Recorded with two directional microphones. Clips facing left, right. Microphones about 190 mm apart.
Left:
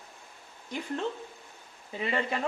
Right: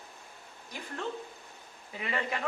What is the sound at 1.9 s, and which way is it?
Speech, 30° left (ahead or behind).